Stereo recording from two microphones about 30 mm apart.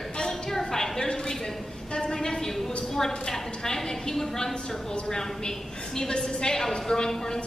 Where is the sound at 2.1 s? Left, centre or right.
Centre.